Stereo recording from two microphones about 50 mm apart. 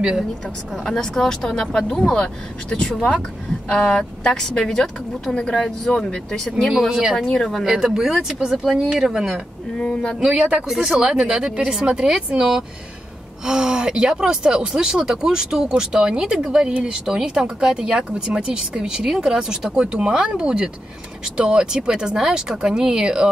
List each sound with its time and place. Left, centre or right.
0.8 s speech: centre
7.7 s speech: centre
9.8 s speech: centre
10.2 s speech: right
10.7 s speech: centre
11.0 s speech: centre